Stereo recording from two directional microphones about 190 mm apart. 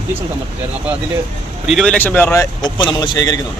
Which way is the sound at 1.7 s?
5° left (ahead or behind).